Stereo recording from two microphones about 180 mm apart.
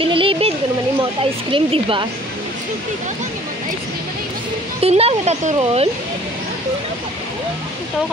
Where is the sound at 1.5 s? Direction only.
30° right (ahead or behind).